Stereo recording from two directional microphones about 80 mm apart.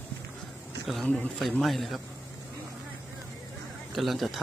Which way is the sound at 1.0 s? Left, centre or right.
Centre.